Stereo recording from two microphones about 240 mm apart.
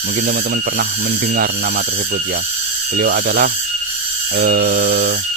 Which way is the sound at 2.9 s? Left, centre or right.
Right.